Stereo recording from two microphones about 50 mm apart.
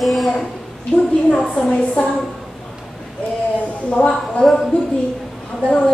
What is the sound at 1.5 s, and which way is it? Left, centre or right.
Speech, centre.